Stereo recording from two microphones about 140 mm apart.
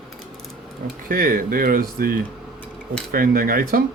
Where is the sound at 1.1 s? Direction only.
90° right.